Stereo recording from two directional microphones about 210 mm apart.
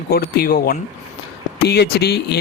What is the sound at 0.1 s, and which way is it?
A man's voice, 45° left (ahead or behind).